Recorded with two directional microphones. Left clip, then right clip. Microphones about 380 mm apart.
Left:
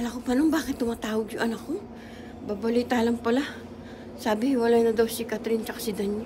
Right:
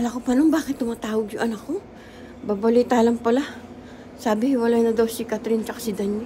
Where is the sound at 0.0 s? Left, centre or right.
Centre.